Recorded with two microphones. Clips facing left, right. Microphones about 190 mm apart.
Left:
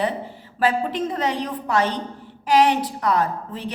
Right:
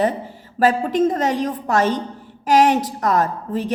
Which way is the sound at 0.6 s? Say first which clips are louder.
Right 5 dB; 45° right (ahead or behind).